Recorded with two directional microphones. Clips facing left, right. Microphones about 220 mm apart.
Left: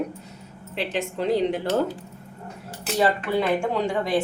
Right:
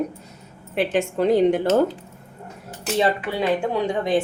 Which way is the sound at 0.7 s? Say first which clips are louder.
Right 6 dB; 50° right (ahead or behind).